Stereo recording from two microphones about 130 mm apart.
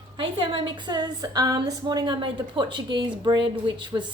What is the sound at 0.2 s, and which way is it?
A woman's voice, 40° right (ahead or behind).